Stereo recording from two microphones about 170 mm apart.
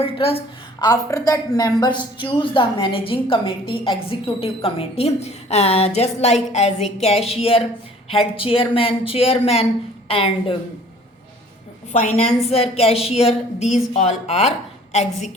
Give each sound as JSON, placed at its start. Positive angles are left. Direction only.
{"t": 0.0, "sound": "a woman's voice", "side_deg": 35}
{"t": 0.9, "sound": "a woman's voice", "side_deg": 20}
{"t": 11.9, "sound": "a woman's voice", "side_deg": 40}